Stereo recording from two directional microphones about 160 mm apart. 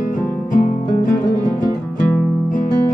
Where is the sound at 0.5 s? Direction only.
55° left (ahead or behind).